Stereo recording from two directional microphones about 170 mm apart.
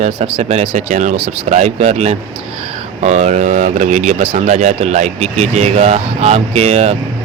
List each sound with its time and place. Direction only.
0.4 s speech: 40° right (ahead or behind)